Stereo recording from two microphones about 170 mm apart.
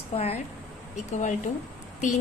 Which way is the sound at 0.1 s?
35° left (ahead or behind).